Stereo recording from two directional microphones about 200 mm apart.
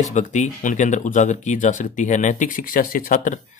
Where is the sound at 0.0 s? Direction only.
35° left (ahead or behind).